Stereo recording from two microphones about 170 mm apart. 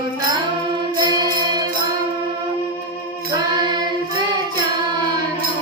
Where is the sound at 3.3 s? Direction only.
25° right (ahead or behind).